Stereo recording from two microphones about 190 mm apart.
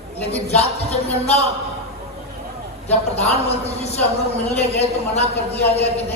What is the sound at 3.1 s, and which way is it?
A man's voice, 35° left (ahead or behind).